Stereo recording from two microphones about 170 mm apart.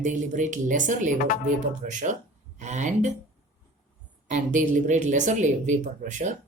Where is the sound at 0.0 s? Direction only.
50° right (ahead or behind).